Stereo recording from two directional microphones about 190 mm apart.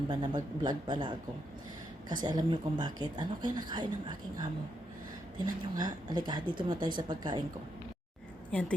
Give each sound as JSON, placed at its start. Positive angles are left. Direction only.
{"t": 0.1, "sound": "speech", "side_deg": -20}
{"t": 5.7, "sound": "speech", "side_deg": -20}